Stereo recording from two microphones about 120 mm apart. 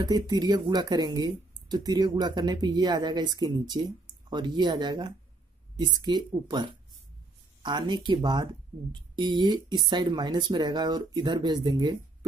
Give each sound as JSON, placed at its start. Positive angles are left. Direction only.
{"t": 0.0, "sound": "speech", "side_deg": -35}